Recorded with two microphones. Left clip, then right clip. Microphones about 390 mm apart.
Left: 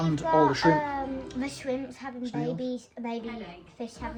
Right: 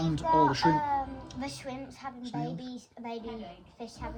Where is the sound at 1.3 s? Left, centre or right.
Centre.